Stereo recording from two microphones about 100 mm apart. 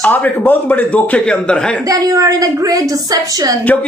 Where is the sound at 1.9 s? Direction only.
35° right (ahead or behind).